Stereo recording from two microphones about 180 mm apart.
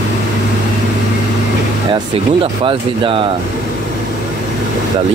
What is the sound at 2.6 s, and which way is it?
Speech, 30° right (ahead or behind).